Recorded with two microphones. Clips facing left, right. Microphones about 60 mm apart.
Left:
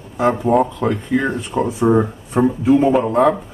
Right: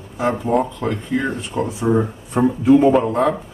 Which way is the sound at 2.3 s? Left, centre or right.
Centre.